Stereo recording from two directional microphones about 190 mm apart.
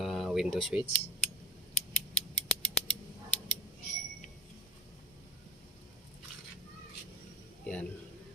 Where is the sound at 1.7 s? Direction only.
35° left (ahead or behind).